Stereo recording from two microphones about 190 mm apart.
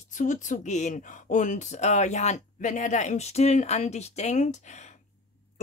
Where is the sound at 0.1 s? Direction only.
40° left (ahead or behind).